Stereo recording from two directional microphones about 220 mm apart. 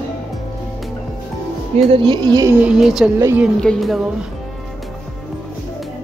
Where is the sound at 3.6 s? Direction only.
Centre (ahead or behind).